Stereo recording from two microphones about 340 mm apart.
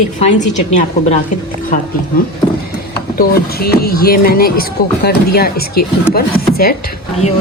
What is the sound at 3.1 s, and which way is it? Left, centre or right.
A woman's voice, left.